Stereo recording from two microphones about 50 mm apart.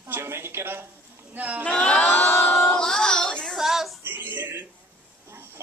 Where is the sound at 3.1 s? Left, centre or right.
Centre.